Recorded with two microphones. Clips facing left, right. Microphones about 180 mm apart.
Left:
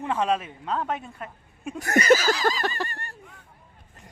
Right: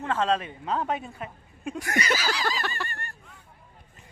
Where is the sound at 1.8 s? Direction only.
45° left (ahead or behind).